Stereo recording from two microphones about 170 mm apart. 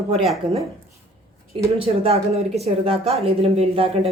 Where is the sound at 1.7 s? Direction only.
35° right (ahead or behind).